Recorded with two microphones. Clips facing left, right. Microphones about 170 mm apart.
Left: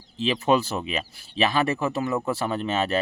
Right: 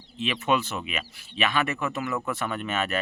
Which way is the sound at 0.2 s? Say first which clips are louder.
Left 4 dB; 35° left (ahead or behind).